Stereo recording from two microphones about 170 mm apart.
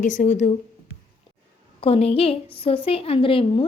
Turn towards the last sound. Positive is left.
turn(degrees=30)  # may be behind; listen again after turning